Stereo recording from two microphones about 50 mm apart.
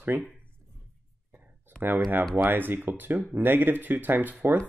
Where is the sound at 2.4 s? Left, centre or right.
Right.